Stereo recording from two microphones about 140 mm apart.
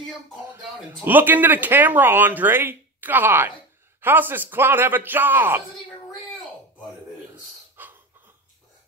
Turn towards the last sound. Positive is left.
turn(degrees=-15)  # may be behind; listen again after turning